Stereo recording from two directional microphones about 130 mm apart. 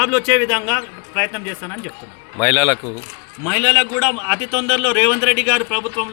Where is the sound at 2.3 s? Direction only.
5° left (ahead or behind).